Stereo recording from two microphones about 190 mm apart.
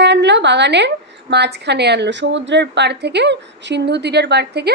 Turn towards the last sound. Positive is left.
turn(degrees=-60)  # may be behind; listen again after turning